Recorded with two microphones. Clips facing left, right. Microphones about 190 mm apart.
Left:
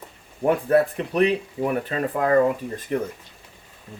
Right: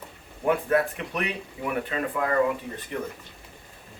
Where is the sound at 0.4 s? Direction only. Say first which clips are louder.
Left 4 dB; 35° left (ahead or behind).